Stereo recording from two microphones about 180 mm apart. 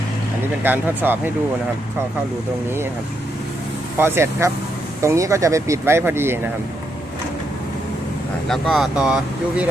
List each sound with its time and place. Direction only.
0.6 s speech: 10° right (ahead or behind)
3.9 s speech: 15° right (ahead or behind)
8.4 s speech: centre (ahead or behind)